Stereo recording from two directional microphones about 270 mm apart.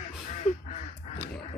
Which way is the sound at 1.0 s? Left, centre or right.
Left.